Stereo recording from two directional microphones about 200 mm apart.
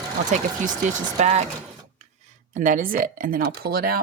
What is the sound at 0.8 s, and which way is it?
Speech, 35° right (ahead or behind).